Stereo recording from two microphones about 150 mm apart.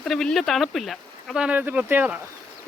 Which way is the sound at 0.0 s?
5° left (ahead or behind).